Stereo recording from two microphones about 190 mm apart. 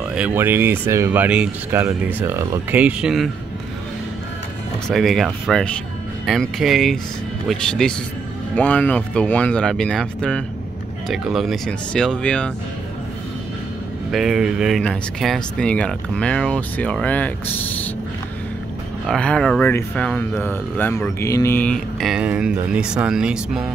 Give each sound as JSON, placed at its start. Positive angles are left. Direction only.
{"t": 0.1, "sound": "speech", "side_deg": -10}
{"t": 4.8, "sound": "speech", "side_deg": 0}
{"t": 14.1, "sound": "speech", "side_deg": 0}
{"t": 19.0, "sound": "speech", "side_deg": 5}